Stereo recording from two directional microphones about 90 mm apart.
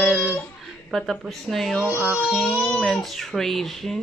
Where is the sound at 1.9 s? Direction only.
10° right (ahead or behind).